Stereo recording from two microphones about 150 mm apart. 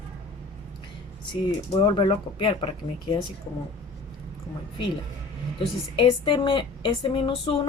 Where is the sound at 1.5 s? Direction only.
30° left (ahead or behind).